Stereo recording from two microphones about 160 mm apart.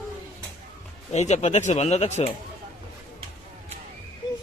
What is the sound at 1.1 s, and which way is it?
Speech, 45° left (ahead or behind).